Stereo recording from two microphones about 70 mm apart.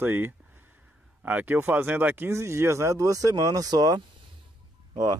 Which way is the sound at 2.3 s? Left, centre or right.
Right.